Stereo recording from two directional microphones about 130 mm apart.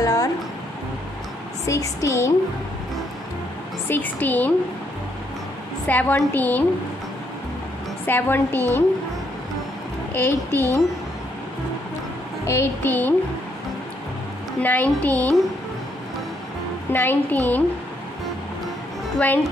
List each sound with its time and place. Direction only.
0.0 s music: 30° left (ahead or behind)
1.7 s a woman's voice: 25° left (ahead or behind)
3.9 s a woman's voice: 15° left (ahead or behind)
5.9 s a woman's voice: 15° left (ahead or behind)
8.1 s a woman's voice: 15° left (ahead or behind)
10.1 s a woman's voice: 20° left (ahead or behind)
12.4 s a woman's voice: 20° left (ahead or behind)
14.6 s a woman's voice: 15° left (ahead or behind)
16.9 s a woman's voice: 15° left (ahead or behind)
19.1 s speech: 15° left (ahead or behind)